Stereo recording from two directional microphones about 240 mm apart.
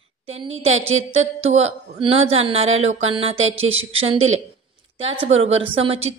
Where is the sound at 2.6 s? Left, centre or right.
Right.